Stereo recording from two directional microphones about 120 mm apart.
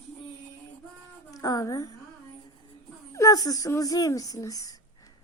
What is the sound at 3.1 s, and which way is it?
Speech, 30° left (ahead or behind).